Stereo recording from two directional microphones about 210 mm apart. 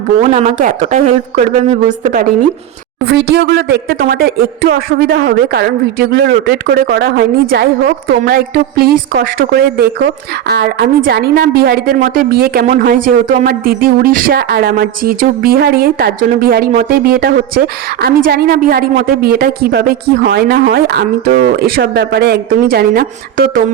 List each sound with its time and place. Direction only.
0.2 s a woman's voice: 30° right (ahead or behind)
3.1 s speech: 50° right (ahead or behind)